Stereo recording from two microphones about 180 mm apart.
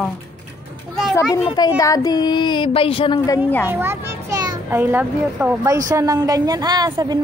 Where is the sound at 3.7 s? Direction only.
15° right (ahead or behind).